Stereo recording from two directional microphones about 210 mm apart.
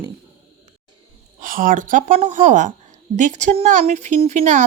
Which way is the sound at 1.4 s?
40° right (ahead or behind).